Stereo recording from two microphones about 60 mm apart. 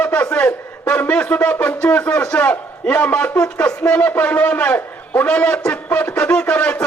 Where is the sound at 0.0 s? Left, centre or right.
Left.